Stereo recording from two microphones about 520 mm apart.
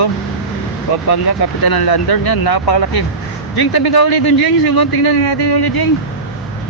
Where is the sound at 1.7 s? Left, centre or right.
Left.